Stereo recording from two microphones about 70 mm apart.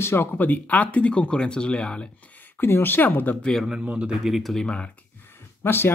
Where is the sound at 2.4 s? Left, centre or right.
Left.